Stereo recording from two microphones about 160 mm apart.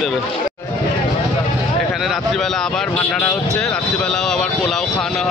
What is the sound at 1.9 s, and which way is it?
Speech, centre (ahead or behind).